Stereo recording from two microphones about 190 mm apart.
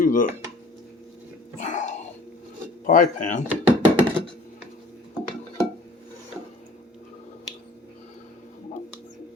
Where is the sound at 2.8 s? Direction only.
45° left (ahead or behind).